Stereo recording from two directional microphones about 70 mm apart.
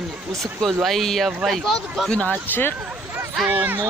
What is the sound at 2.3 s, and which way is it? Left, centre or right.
Speech, left.